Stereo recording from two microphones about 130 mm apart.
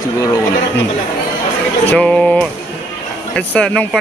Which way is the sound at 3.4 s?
10° left (ahead or behind).